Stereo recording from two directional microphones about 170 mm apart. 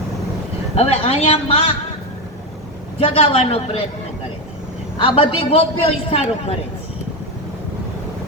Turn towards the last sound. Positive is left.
turn(degrees=35)  # may be behind; listen again after turning